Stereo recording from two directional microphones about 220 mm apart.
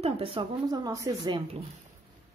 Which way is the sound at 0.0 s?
25° right (ahead or behind).